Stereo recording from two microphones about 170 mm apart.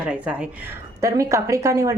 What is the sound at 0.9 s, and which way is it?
Speech, 20° right (ahead or behind).